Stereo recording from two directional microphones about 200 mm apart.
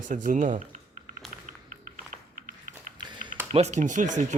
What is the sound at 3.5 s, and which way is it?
Speech, 35° right (ahead or behind).